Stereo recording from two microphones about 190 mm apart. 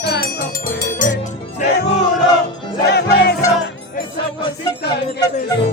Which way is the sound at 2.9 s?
60° left (ahead or behind).